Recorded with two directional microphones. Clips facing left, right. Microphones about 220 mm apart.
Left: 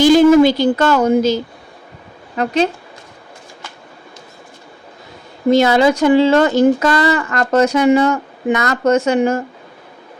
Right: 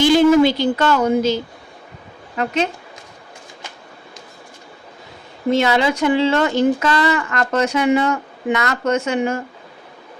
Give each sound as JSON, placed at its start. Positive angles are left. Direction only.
{"t": 0.0, "sound": "speech", "side_deg": 40}
{"t": 5.5, "sound": "speech", "side_deg": 40}